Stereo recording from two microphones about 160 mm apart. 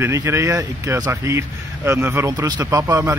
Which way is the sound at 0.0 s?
15° right (ahead or behind).